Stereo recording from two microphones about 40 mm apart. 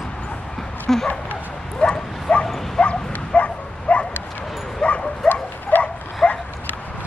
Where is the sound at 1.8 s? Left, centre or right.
Left.